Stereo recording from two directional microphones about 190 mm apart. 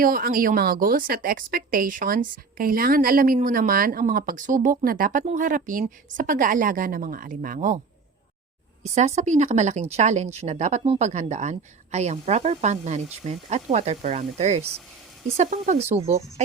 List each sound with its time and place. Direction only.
0.0 s a woman's voice: 50° right (ahead or behind)
8.8 s speech: 35° right (ahead or behind)